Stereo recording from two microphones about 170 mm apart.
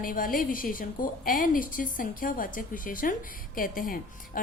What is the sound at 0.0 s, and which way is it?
A woman's voice, 55° left (ahead or behind).